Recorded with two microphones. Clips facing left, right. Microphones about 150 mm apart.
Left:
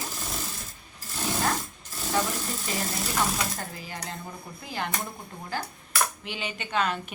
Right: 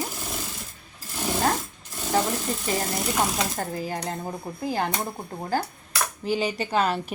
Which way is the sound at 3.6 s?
40° right (ahead or behind).